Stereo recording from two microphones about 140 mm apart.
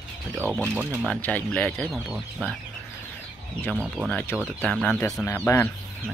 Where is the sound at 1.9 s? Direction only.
5° right (ahead or behind).